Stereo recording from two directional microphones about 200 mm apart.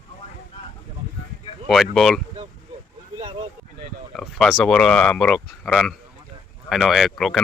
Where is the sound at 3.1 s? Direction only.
25° right (ahead or behind).